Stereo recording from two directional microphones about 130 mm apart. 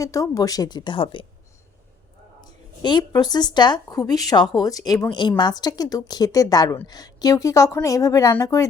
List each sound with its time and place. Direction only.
0.0 s speech: 25° left (ahead or behind); by 1.3 s 40° left (ahead or behind)
2.4 s a woman's voice: 35° left (ahead or behind)